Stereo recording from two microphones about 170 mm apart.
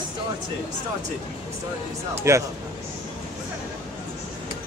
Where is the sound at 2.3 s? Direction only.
15° right (ahead or behind).